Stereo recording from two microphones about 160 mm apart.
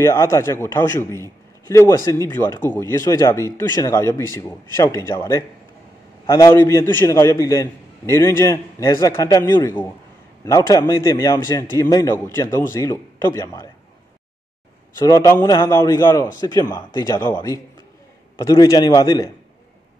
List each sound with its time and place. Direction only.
0.0 s a man's voice: 20° left (ahead or behind)
15.0 s a man's voice: 20° left (ahead or behind)